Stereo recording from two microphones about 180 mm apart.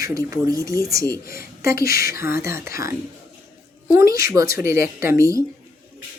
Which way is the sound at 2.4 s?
15° right (ahead or behind).